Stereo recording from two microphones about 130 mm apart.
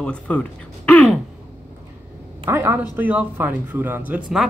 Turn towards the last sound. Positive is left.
turn(degrees=-5)  # may be behind; listen again after turning